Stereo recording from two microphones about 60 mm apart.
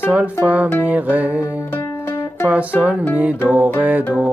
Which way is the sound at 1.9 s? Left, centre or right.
Left.